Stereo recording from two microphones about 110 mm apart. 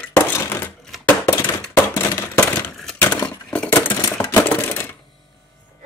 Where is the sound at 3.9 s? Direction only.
15° left (ahead or behind).